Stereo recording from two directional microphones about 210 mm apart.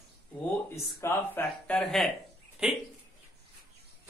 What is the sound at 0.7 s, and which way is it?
Speech, 10° left (ahead or behind).